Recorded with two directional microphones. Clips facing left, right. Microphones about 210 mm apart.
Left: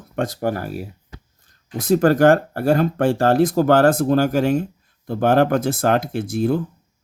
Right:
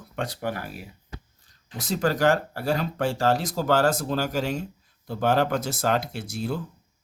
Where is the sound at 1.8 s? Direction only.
55° left (ahead or behind).